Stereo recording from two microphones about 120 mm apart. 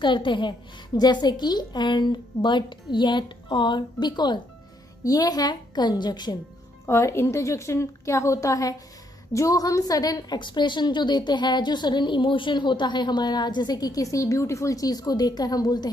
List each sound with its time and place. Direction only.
0.0 s a woman's voice: 40° left (ahead or behind)
6.9 s a woman's voice: 25° left (ahead or behind)